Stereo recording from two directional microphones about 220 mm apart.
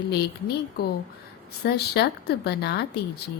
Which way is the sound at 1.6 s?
50° left (ahead or behind).